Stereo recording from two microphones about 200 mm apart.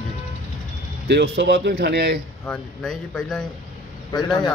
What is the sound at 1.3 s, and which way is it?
Speech, 55° right (ahead or behind).